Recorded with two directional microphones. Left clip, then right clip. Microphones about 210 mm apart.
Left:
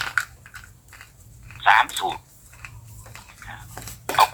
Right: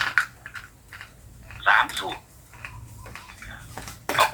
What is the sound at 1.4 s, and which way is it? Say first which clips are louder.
Dog: left 3 dB; 40° left (ahead or behind).